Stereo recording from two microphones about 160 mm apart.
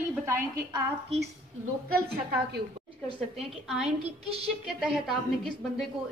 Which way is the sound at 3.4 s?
Centre (ahead or behind).